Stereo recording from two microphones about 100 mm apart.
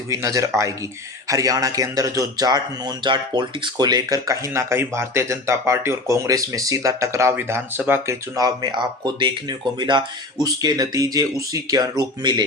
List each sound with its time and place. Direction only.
0.1 s a man's voice: 30° right (ahead or behind)
8.4 s a man's voice: 45° right (ahead or behind)